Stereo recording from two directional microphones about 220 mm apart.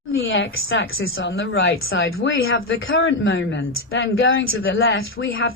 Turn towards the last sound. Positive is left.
turn(degrees=65)  # may be behind; listen again after turning